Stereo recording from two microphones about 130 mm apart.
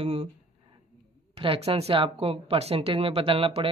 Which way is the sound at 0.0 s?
45° right (ahead or behind).